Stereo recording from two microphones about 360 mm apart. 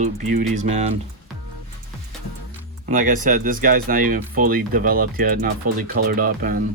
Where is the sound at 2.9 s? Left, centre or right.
Right.